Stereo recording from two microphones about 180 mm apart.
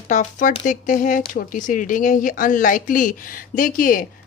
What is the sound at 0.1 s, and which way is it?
Speech, 45° left (ahead or behind).